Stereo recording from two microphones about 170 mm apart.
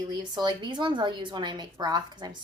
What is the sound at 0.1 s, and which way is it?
A woman's voice, 25° right (ahead or behind).